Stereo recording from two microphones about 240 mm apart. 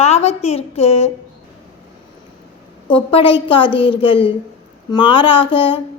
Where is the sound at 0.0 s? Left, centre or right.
Left.